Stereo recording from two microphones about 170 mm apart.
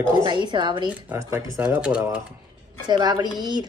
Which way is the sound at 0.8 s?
10° right (ahead or behind).